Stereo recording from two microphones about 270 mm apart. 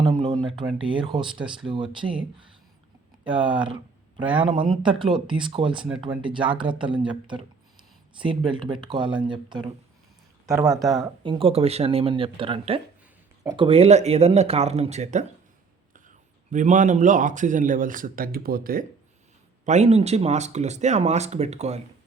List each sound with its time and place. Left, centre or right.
0.0 s speech: centre
3.2 s speech: centre
10.7 s speech: centre
11.0 s a man's voice: centre